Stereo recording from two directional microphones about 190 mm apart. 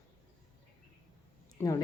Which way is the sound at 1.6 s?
20° left (ahead or behind).